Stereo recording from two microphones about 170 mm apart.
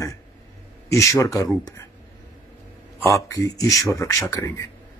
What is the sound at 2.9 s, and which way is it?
Speech, 20° left (ahead or behind).